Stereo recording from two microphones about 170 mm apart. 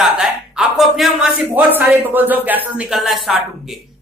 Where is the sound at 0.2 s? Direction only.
Centre (ahead or behind).